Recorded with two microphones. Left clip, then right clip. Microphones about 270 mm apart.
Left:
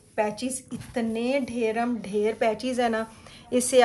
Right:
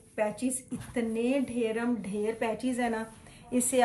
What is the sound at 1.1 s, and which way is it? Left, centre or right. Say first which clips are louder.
A woman's voice: left 3 dB; centre.